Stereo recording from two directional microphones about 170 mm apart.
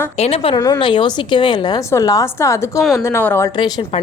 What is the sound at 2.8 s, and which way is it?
Speech, centre (ahead or behind).